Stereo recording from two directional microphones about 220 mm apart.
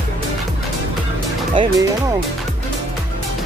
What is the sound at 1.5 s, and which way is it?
Speech, 20° right (ahead or behind).